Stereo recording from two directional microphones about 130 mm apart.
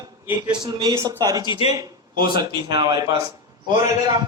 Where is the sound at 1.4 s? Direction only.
45° left (ahead or behind).